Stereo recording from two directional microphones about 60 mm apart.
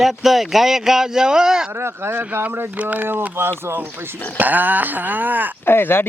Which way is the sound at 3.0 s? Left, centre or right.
Right.